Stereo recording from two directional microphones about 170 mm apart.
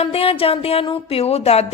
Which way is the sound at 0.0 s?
35° left (ahead or behind).